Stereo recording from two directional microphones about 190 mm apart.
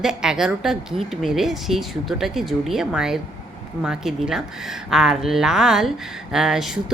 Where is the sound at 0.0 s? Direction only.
5° right (ahead or behind).